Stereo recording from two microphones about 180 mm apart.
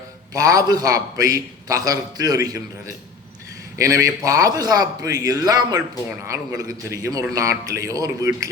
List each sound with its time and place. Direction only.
0.3 s a man's voice: 20° right (ahead or behind)
4.0 s a man's voice: 20° right (ahead or behind)